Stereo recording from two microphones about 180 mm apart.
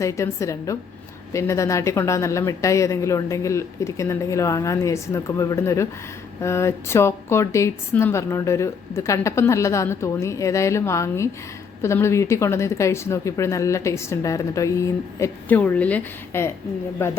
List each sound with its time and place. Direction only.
0.0 s a woman's voice: 15° left (ahead or behind)